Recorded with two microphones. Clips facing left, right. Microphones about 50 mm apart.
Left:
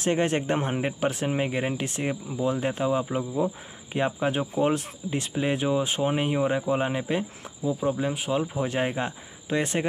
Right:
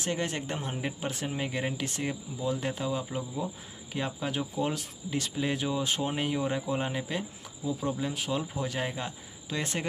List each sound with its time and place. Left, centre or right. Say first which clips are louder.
0.0 s speech: left 8 dB; left